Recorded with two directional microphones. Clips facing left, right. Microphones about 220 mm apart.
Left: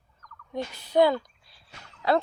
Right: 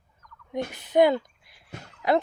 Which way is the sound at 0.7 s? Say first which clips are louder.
Right 1 dB; 20° right (ahead or behind).